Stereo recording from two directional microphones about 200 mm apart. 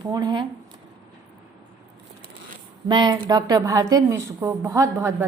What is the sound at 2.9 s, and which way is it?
A woman's voice, 20° right (ahead or behind).